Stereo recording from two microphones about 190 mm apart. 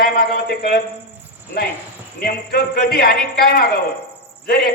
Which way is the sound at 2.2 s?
55° left (ahead or behind).